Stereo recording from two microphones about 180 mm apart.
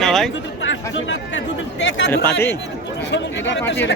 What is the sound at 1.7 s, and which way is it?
Speech, 85° left.